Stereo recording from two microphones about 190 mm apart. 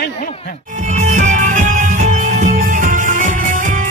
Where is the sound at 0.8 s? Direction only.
40° right (ahead or behind).